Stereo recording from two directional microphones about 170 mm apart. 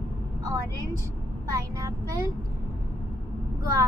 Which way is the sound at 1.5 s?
20° right (ahead or behind).